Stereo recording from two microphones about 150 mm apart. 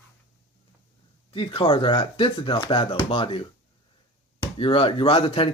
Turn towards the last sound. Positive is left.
turn(degrees=35)  # may be behind; listen again after turning